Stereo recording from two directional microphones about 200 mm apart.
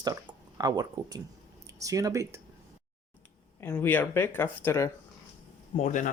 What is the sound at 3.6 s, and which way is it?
Speech, 10° left (ahead or behind).